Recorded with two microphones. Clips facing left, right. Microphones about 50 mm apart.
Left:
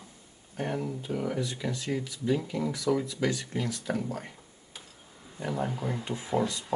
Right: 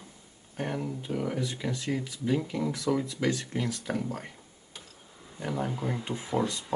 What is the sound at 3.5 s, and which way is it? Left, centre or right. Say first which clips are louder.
Speech: right 1 dB; centre.